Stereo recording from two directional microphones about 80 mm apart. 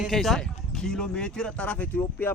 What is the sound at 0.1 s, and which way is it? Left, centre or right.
Speech, centre.